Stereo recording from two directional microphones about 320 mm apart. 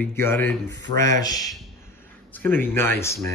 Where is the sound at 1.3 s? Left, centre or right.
Centre.